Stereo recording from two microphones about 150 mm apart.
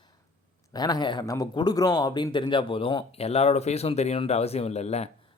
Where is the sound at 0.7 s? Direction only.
25° left (ahead or behind); by 5.1 s 45° left (ahead or behind).